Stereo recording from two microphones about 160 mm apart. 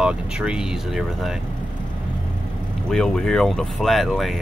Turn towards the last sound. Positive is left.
turn(degrees=0)  # may be behind; listen again after turning